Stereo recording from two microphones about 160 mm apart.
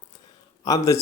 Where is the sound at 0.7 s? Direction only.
20° left (ahead or behind).